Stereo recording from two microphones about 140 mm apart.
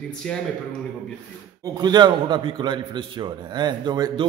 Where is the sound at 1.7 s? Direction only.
30° right (ahead or behind).